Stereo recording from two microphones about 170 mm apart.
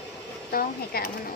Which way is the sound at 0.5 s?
60° left (ahead or behind).